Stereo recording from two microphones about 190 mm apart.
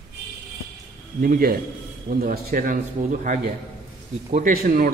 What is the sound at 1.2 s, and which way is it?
A man's voice, 50° right (ahead or behind).